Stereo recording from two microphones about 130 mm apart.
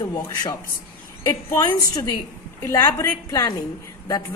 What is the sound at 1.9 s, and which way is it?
A woman's voice, 30° left (ahead or behind).